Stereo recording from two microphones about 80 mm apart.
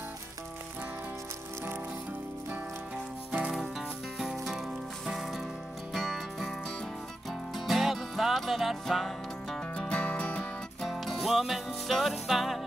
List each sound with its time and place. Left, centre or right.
3.3 s music: centre
7.5 s music: centre
9.8 s music: centre
10.8 s music: centre